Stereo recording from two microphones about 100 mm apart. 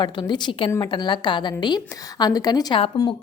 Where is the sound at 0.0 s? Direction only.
50° left (ahead or behind).